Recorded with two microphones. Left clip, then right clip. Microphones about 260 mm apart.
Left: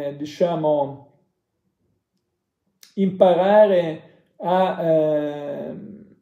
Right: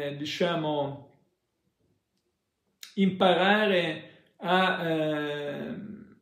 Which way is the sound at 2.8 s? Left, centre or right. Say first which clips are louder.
Left 8 dB; centre.